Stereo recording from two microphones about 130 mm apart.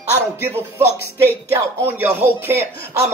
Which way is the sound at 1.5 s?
15° right (ahead or behind).